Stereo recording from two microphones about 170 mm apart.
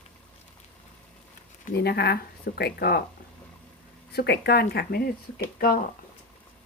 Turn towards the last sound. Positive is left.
turn(degrees=60)  # may be behind; listen again after turning